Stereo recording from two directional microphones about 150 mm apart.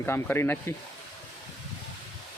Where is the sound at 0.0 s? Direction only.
15° left (ahead or behind).